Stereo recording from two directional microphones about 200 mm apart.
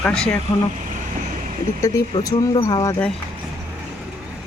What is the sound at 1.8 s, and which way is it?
Speech, 15° left (ahead or behind).